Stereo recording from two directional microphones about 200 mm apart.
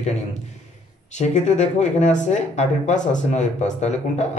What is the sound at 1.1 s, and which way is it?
Speech, 35° left (ahead or behind).